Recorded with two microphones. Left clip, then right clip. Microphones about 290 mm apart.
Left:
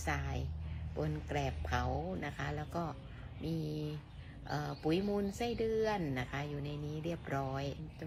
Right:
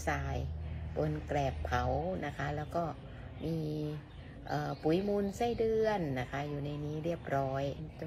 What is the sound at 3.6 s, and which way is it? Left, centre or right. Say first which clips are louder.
Speech: right 3 dB; left.